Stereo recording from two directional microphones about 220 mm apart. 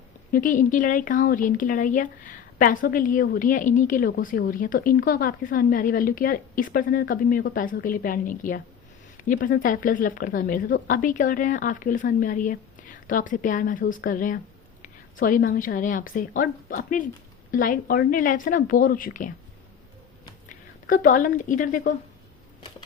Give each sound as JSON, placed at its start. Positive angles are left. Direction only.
{"t": 0.3, "sound": "speech", "side_deg": 40}
{"t": 20.8, "sound": "speech", "side_deg": 40}